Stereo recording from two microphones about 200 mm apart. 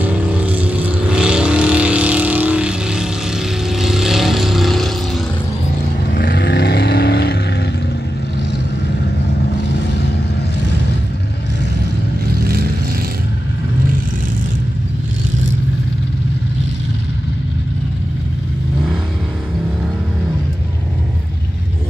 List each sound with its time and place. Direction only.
0.0 s vehicle: 5° right (ahead or behind)
6.0 s vehicle: 55° left (ahead or behind)